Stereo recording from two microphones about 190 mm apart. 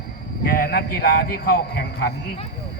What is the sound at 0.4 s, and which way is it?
A man's voice, 50° left (ahead or behind).